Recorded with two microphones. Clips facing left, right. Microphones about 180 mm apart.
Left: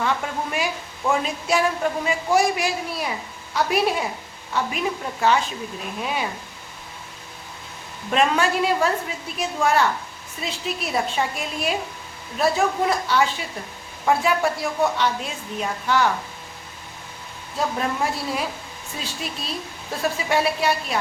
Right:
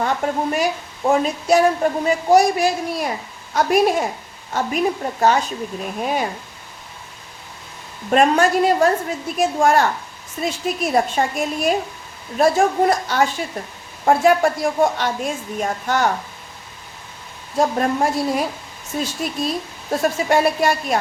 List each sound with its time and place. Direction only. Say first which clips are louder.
0.0 s a woman's voice: right 5 dB; 45° right (ahead or behind)
8.1 s a woman's voice: right 5 dB; 45° right (ahead or behind)
17.6 s a woman's voice: right 6 dB; 45° right (ahead or behind)